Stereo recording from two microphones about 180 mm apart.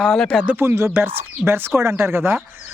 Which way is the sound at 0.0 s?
Centre (ahead or behind).